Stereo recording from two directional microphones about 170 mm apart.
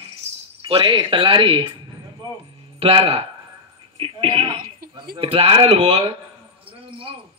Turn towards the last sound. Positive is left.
turn(degrees=-35)  # may be behind; listen again after turning